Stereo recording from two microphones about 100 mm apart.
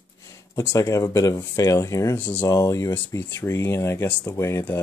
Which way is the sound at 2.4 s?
35° left (ahead or behind).